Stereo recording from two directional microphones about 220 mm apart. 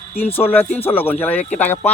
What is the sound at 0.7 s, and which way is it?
Speech, 25° left (ahead or behind).